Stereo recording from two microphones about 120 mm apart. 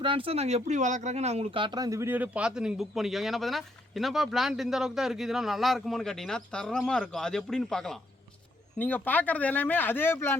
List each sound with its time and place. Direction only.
0.0 s speech: 45° right (ahead or behind); by 1.5 s 65° right (ahead or behind)
1.5 s a man's voice: 40° right (ahead or behind); by 7.9 s 5° left (ahead or behind)
8.7 s speech: 15° left (ahead or behind)